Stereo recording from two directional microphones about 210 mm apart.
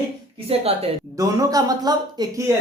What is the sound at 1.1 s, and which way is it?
Speech, 15° right (ahead or behind).